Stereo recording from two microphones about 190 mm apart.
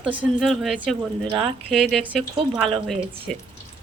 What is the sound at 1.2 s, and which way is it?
Speech, 25° right (ahead or behind).